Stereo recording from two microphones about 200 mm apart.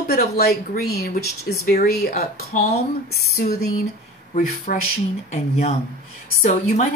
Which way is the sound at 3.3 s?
50° left (ahead or behind).